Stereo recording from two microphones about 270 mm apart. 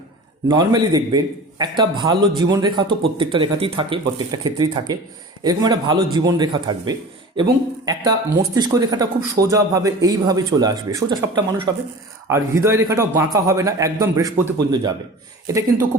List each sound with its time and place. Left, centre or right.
0.4 s a man's voice: centre
8.5 s a man's voice: centre